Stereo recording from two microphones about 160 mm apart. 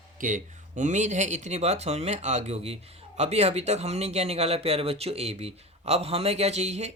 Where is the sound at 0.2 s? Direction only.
55° right (ahead or behind).